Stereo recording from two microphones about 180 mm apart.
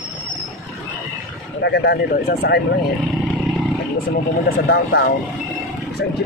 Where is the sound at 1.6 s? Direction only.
65° left (ahead or behind).